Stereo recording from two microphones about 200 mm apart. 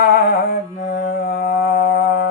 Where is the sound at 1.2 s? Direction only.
50° left (ahead or behind).